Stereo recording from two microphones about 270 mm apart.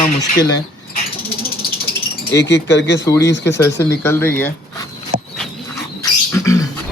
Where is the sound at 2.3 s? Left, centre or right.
Left.